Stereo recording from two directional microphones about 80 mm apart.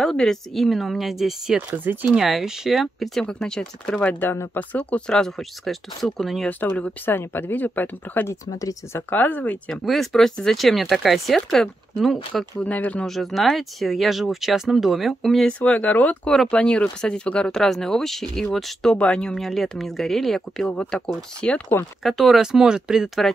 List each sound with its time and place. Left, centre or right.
0.0 s speech: centre
6.6 s speech: left
8.5 s speech: left
9.1 s speech: centre
9.8 s speech: centre
12.5 s speech: centre
13.0 s speech: centre
15.4 s speech: centre
22.0 s speech: centre